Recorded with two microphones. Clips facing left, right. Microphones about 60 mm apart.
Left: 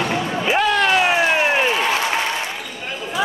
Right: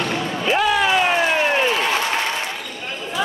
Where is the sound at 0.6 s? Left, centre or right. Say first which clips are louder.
Left 1 dB; centre.